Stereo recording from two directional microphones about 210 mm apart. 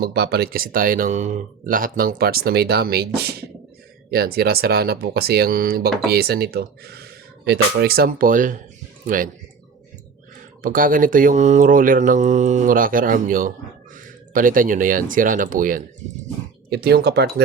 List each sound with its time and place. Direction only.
0.0 s speech: 50° right (ahead or behind)
10.6 s speech: 40° right (ahead or behind)